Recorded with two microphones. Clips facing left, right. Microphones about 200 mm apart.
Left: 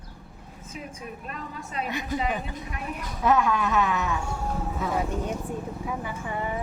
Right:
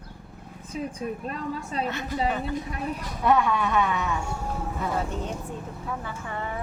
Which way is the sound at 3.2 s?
Centre (ahead or behind).